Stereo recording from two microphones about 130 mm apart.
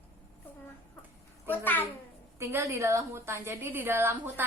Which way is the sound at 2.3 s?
20° right (ahead or behind).